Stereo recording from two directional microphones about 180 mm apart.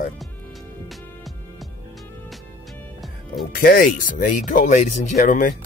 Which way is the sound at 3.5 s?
55° left (ahead or behind).